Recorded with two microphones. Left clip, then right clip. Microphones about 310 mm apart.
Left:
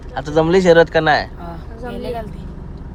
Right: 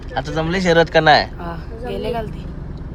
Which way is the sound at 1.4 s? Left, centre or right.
Right.